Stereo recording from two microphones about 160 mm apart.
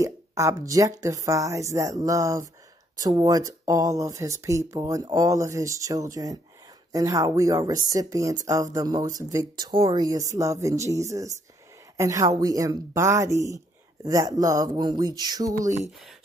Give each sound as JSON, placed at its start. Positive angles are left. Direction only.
{"t": 0.0, "sound": "speech", "side_deg": -20}